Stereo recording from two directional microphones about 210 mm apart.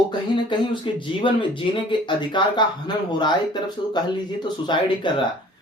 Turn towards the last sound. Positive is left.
turn(degrees=20)  # may be behind; listen again after turning